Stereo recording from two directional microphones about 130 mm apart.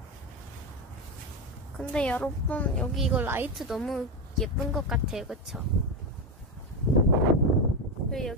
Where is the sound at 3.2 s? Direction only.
15° right (ahead or behind).